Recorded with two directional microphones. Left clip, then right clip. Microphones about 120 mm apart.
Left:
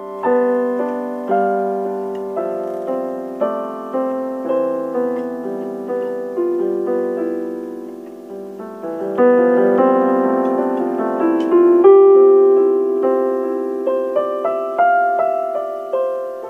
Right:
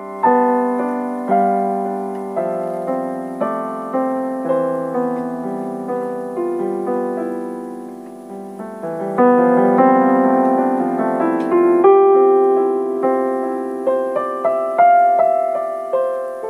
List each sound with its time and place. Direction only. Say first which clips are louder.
0.2 s keyboard: right 2 dB; 25° right (ahead or behind)
2.3 s music: right 3 dB; 30° right (ahead or behind)
9.1 s music: even; 30° right (ahead or behind)